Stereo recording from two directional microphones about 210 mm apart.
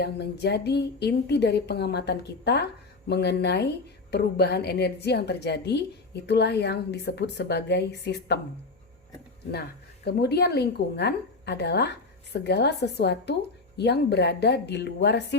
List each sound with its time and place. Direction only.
0.0 s a woman's voice: 50° left (ahead or behind)
9.5 s a woman's voice: 50° left (ahead or behind)